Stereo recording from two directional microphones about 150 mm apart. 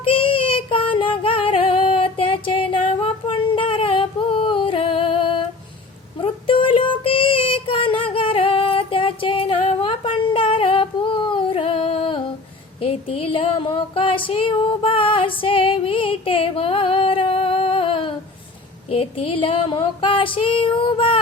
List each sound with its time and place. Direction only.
0.0 s child singing: 35° left (ahead or behind)
18.9 s female singing: 40° left (ahead or behind)